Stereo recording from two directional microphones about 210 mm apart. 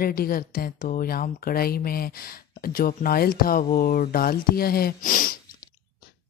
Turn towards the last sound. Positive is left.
turn(degrees=40)  # may be behind; listen again after turning